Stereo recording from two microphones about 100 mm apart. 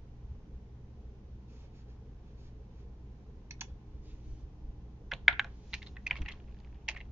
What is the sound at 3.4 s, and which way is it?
Computer keyboard, 25° right (ahead or behind).